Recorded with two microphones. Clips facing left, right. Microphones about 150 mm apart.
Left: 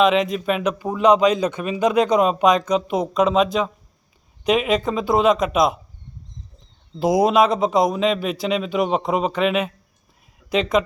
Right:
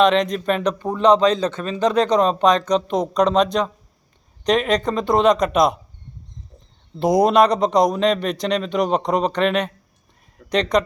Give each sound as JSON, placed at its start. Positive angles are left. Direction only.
{"t": 0.0, "sound": "a man's voice", "side_deg": 5}
{"t": 7.0, "sound": "a man's voice", "side_deg": 5}